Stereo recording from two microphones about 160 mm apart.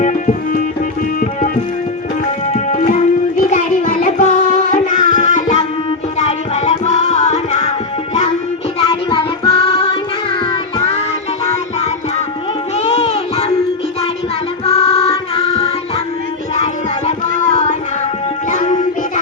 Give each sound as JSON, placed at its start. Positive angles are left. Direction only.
{"t": 0.0, "sound": "music", "side_deg": 50}
{"t": 2.5, "sound": "music", "side_deg": 50}
{"t": 8.8, "sound": "child singing", "side_deg": 35}
{"t": 10.4, "sound": "music", "side_deg": 35}
{"t": 12.7, "sound": "music", "side_deg": 40}
{"t": 14.7, "sound": "music", "side_deg": 40}
{"t": 17.1, "sound": "music", "side_deg": 50}